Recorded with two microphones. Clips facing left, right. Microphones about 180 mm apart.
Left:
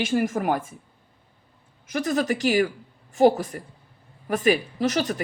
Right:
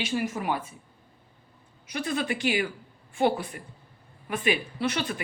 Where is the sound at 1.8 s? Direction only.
45° left (ahead or behind).